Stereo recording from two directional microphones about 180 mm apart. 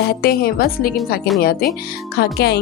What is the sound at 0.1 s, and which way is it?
Speech, 60° left (ahead or behind).